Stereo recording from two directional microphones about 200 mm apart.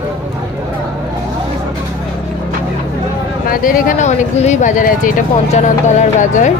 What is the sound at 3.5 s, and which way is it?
Speech, 45° left (ahead or behind).